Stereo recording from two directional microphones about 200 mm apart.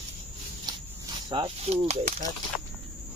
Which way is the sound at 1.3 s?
25° right (ahead or behind).